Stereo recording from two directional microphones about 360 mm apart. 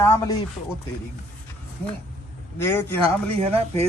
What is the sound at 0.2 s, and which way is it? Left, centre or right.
Speech, centre.